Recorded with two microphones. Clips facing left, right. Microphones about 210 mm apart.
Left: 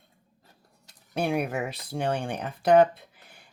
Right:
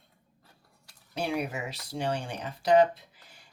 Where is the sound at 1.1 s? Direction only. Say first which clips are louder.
Left 4 dB; 55° left (ahead or behind).